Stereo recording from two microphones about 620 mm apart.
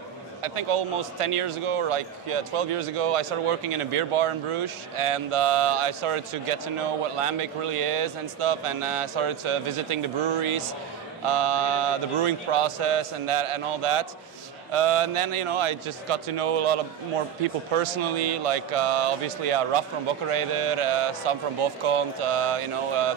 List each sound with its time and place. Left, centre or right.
0.4 s a man's voice: right